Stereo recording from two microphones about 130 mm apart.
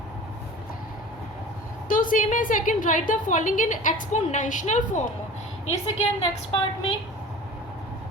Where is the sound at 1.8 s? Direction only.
90° left; by 5.0 s 70° left (ahead or behind).